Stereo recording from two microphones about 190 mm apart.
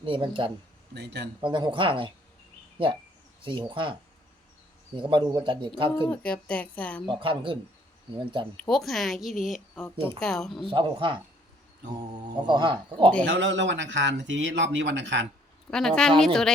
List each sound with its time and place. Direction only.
0.0 s a man's voice: 25° right (ahead or behind)
0.9 s speech: 60° right (ahead or behind)
1.4 s a man's voice: 25° right (ahead or behind)
3.8 s a man's voice: 25° right (ahead or behind)
4.9 s a man's voice: 25° right (ahead or behind)
6.0 s speech: 5° left (ahead or behind)
7.0 s a man's voice: 25° right (ahead or behind)
8.5 s a woman's voice: centre (ahead or behind)
10.7 s a man's voice: 25° right (ahead or behind)
12.5 s a man's voice: 25° right (ahead or behind)
13.2 s speech: 70° right (ahead or behind)
15.7 s a woman's voice: 5° left (ahead or behind)